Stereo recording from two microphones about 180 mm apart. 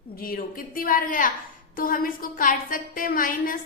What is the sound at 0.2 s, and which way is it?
A woman's voice, 55° left (ahead or behind).